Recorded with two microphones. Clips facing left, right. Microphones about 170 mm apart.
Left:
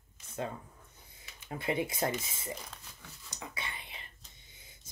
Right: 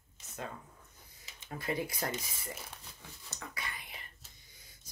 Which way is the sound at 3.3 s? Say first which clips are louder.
Left 1 dB; 20° left (ahead or behind).